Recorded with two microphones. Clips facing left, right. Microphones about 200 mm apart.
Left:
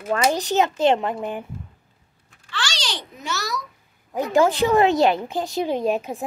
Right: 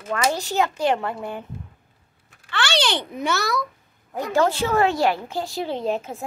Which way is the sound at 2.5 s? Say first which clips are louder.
Right 7 dB; 60° right (ahead or behind).